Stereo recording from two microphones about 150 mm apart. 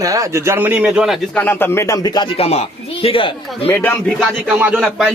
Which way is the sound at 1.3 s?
10° left (ahead or behind).